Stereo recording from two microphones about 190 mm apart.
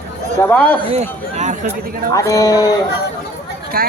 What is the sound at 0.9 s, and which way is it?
Speech, 35° right (ahead or behind).